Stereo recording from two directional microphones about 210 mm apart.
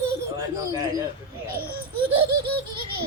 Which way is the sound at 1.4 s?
45° right (ahead or behind).